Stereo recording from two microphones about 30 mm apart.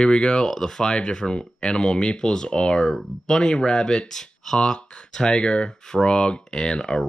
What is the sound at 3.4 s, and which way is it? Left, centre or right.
Speech, left.